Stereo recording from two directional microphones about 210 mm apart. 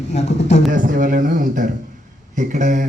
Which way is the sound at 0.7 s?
40° right (ahead or behind).